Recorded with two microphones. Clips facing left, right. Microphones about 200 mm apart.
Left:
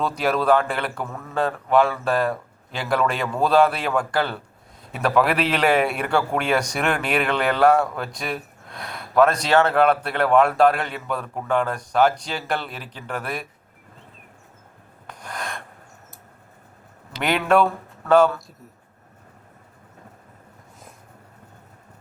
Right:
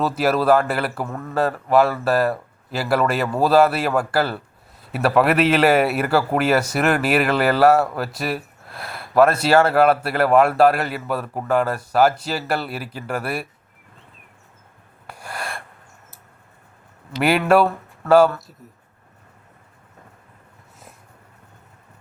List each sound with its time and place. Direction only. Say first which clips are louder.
0.0 s a man's voice: right 3 dB; 5° right (ahead or behind)
15.0 s rub: right 1 dB; 10° right (ahead or behind)
17.2 s a man's voice: right 3 dB; 5° right (ahead or behind)